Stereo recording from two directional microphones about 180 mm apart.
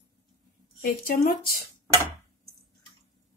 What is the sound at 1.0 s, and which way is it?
Speech, 55° left (ahead or behind).